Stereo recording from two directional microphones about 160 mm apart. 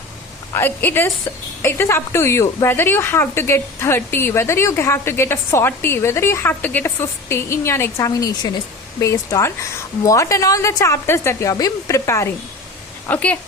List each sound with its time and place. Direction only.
0.5 s a woman's voice: 10° left (ahead or behind)